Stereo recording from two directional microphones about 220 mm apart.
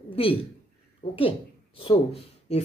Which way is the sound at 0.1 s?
25° left (ahead or behind).